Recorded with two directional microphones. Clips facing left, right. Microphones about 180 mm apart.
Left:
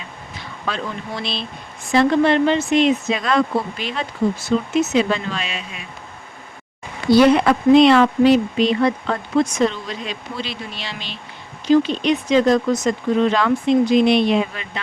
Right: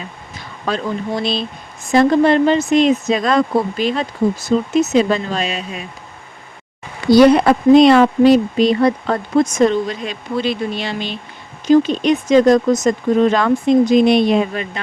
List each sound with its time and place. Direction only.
0.3 s speech: 40° right (ahead or behind)
7.1 s speech: 40° right (ahead or behind)